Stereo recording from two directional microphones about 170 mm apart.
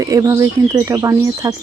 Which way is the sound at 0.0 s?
20° right (ahead or behind).